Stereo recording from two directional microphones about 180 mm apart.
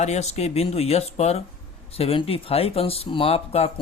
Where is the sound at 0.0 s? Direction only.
40° left (ahead or behind).